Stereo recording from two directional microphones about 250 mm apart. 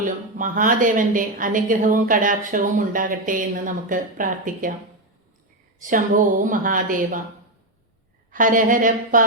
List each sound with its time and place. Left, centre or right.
0.0 s a woman's voice: right
5.8 s a woman's voice: right
8.3 s a woman's voice: right